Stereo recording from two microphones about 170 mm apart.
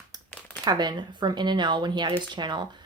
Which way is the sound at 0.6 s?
25° right (ahead or behind).